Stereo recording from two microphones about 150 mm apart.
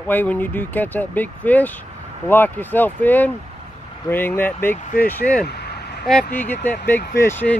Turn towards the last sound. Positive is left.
turn(degrees=15)  # may be behind; listen again after turning